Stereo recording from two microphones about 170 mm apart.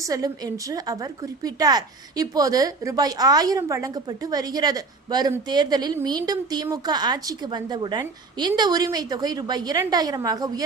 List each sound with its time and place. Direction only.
0.0 s a woman's voice: 20° right (ahead or behind)